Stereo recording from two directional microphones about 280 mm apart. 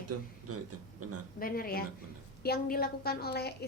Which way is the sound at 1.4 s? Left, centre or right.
Left.